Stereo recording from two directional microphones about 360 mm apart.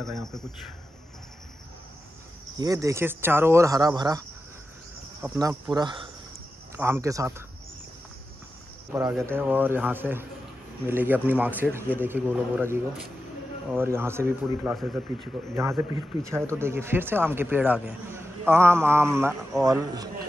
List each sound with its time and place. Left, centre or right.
0.0 s speech: centre
2.5 s a man's voice: centre
5.2 s a man's voice: centre
8.9 s a man's voice: centre